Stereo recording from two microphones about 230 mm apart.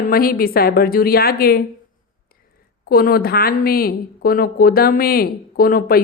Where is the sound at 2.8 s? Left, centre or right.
Left.